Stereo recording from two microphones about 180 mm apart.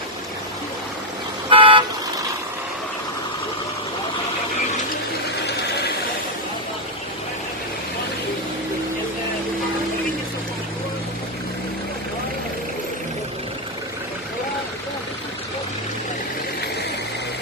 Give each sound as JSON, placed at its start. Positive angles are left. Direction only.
{"t": 1.5, "sound": "vehicle", "side_deg": -30}